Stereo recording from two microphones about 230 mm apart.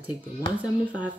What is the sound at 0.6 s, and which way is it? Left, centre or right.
Speech, centre.